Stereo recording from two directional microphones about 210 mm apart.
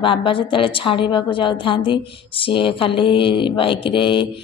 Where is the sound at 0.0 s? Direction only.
25° left (ahead or behind).